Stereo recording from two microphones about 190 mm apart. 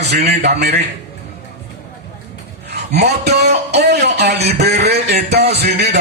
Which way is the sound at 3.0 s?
60° right (ahead or behind).